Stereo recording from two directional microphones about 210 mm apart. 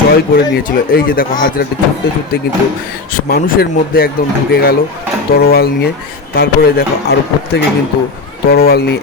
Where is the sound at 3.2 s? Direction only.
45° left (ahead or behind).